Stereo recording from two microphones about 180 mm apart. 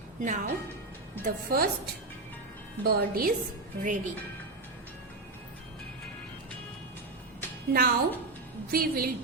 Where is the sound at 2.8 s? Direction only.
60° right (ahead or behind).